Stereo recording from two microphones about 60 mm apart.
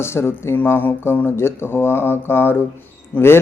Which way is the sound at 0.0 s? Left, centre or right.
Left.